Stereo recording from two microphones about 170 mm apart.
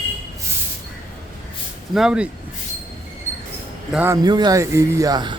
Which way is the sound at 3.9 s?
10° right (ahead or behind).